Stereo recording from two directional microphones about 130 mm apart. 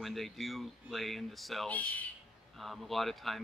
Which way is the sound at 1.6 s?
10° left (ahead or behind).